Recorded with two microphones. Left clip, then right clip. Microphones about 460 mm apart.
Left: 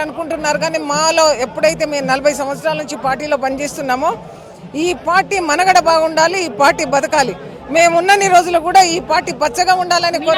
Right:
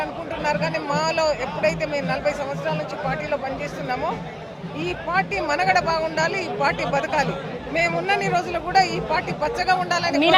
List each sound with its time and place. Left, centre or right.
0.0 s speech: left